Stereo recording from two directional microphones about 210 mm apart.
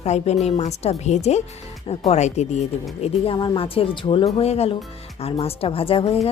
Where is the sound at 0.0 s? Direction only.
30° left (ahead or behind).